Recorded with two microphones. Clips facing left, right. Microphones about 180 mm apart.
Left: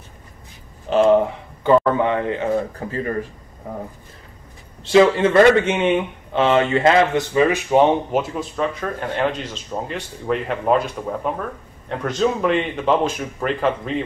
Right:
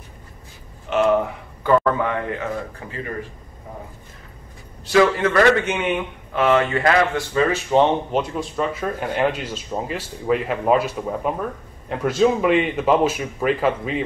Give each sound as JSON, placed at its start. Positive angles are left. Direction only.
{"t": 0.8, "sound": "speech", "side_deg": 30}
{"t": 4.8, "sound": "speech", "side_deg": 25}